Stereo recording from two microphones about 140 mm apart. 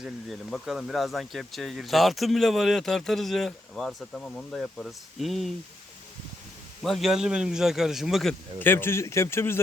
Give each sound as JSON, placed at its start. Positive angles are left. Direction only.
{"t": 0.0, "sound": "speech", "side_deg": 0}
{"t": 6.8, "sound": "speech", "side_deg": 0}
{"t": 8.5, "sound": "a man's voice", "side_deg": 15}